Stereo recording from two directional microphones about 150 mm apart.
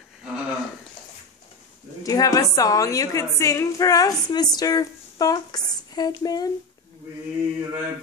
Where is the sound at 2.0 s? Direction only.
25° left (ahead or behind).